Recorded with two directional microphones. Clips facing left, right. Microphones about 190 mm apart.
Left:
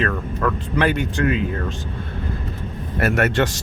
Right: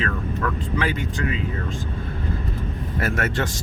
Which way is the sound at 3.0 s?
70° left (ahead or behind).